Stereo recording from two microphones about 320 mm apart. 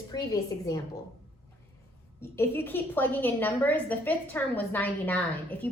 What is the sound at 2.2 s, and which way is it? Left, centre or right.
A woman's voice, centre.